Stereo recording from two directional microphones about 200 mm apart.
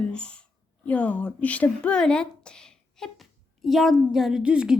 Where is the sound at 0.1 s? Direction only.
5° left (ahead or behind).